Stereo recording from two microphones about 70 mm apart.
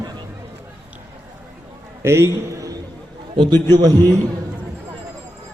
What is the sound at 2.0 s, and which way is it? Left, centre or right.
Speech, right.